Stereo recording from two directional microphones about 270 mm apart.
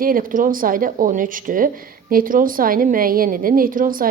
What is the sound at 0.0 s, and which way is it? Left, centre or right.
A woman's voice, right.